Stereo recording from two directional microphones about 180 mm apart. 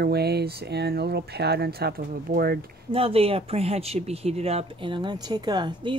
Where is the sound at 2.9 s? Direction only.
30° right (ahead or behind).